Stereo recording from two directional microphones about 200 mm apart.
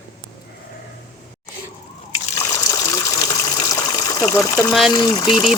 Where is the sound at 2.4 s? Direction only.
15° left (ahead or behind).